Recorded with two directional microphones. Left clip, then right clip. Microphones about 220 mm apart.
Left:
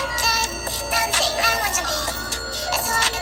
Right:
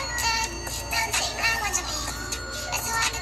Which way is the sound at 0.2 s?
45° left (ahead or behind).